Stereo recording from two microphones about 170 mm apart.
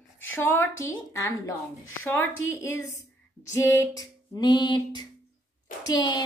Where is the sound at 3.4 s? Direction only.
15° left (ahead or behind).